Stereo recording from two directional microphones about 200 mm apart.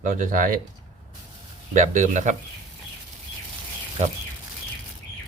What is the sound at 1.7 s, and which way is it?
Speech, 40° right (ahead or behind).